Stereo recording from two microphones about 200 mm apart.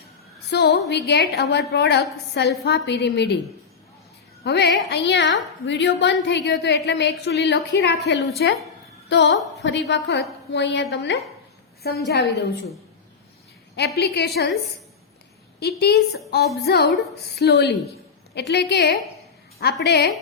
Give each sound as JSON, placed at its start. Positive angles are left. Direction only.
{"t": 0.5, "sound": "a woman's voice", "side_deg": 55}
{"t": 4.4, "sound": "a woman's voice", "side_deg": 55}
{"t": 13.7, "sound": "a woman's voice", "side_deg": 55}
{"t": 15.6, "sound": "a woman's voice", "side_deg": 55}